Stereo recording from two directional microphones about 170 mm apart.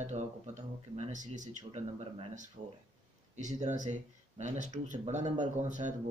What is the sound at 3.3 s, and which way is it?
Speech, 45° right (ahead or behind).